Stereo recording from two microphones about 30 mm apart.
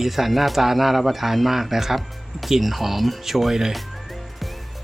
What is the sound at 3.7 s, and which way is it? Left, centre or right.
Music, centre.